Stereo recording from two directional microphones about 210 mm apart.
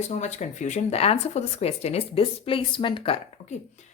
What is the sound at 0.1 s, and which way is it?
Speech, 35° left (ahead or behind).